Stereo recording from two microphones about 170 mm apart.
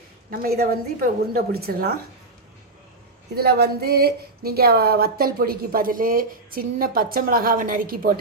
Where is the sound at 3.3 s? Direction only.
70° right (ahead or behind).